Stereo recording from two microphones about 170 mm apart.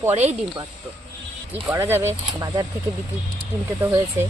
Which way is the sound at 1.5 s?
10° right (ahead or behind).